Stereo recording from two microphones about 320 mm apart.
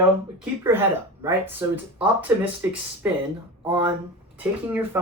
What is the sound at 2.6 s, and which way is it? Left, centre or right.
Speech, centre.